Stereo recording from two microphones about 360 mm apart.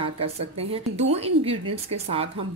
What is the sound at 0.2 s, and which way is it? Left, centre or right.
Speech, right.